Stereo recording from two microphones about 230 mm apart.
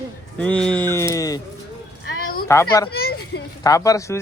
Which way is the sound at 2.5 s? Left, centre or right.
Centre.